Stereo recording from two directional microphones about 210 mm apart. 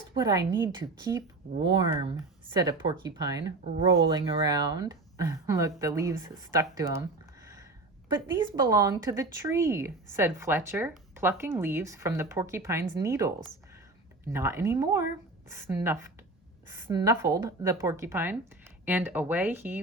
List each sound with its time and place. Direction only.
0.1 s speech: 20° right (ahead or behind)
8.1 s speech: 15° right (ahead or behind)